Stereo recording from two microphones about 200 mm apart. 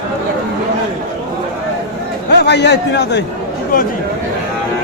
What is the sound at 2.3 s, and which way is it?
Speech, 55° left (ahead or behind).